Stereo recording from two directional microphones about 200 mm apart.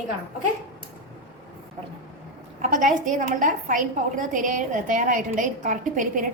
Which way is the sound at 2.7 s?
40° right (ahead or behind).